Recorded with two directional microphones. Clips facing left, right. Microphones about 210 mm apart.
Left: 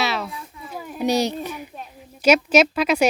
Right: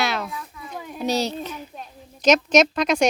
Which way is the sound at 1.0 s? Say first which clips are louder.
Left 3 dB; 15° left (ahead or behind).